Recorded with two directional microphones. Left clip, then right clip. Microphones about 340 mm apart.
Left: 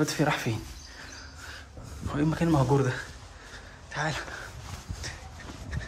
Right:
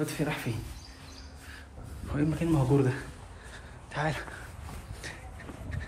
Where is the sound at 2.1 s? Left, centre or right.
Centre.